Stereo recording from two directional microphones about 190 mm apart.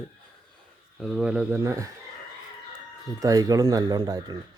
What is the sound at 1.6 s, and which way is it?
Speech, 15° right (ahead or behind).